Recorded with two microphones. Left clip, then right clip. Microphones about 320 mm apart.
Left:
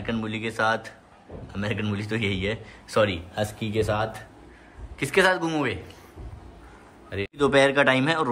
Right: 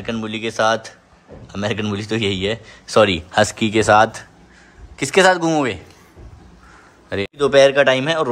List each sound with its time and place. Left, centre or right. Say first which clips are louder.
0.0 s a man's voice: right 5 dB; centre
7.1 s a man's voice: right 6 dB; centre